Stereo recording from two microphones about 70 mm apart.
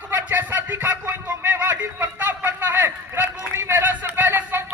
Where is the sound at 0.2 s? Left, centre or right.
Right.